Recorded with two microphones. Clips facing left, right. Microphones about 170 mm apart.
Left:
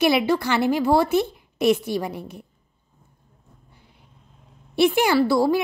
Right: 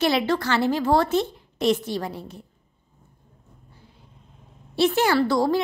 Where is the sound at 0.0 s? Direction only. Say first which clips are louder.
Left 2 dB; 10° left (ahead or behind).